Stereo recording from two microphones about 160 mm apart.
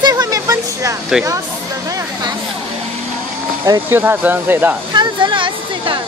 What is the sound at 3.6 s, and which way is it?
Speech, 15° right (ahead or behind).